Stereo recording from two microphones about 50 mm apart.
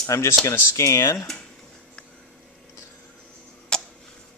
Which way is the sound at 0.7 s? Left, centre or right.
Left.